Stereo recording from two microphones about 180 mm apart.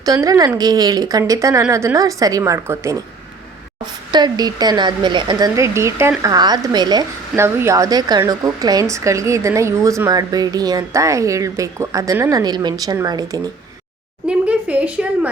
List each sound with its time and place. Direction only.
0.0 s a woman's voice: 20° right (ahead or behind)
4.1 s a woman's voice: 25° right (ahead or behind)
14.3 s speech: 5° right (ahead or behind)